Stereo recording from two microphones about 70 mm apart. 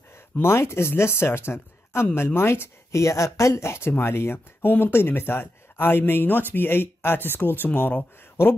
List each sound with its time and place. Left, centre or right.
0.4 s speech: left